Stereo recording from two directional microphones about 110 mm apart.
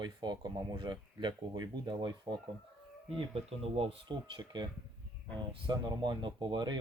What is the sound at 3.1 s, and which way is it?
Speech, 65° right (ahead or behind).